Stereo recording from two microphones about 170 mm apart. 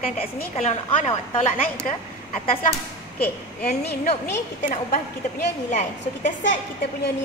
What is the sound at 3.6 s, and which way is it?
Speech, 70° left (ahead or behind).